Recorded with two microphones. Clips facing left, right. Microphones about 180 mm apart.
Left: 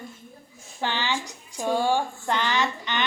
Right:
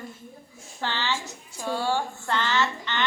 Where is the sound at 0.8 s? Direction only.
15° left (ahead or behind).